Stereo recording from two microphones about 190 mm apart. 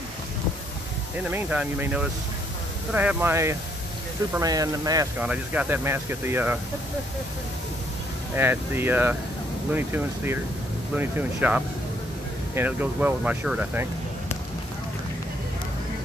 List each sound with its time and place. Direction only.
1.3 s speech: 10° right (ahead or behind)
5.2 s speech: 5° right (ahead or behind)
8.4 s speech: 10° right (ahead or behind)